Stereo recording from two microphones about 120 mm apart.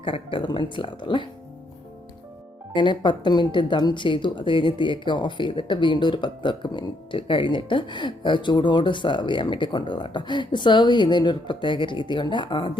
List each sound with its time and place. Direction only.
0.0 s speech: 45° left (ahead or behind)
2.7 s a woman's voice: 40° left (ahead or behind)